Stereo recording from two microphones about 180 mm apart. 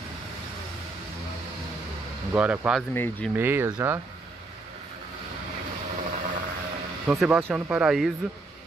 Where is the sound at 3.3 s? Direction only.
10° right (ahead or behind).